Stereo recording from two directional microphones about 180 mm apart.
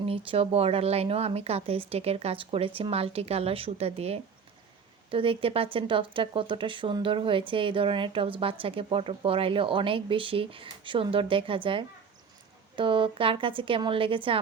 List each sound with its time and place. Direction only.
0.3 s speech: 35° right (ahead or behind)